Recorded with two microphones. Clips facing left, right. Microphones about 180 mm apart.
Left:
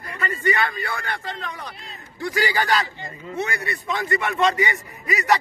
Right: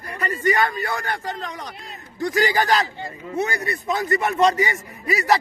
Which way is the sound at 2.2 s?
45° right (ahead or behind).